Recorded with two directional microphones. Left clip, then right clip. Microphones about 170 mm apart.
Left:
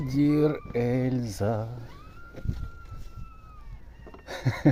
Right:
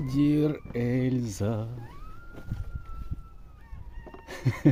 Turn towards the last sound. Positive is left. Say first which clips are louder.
# left 1 dB
turn(degrees=-20)  # may be behind; listen again after turning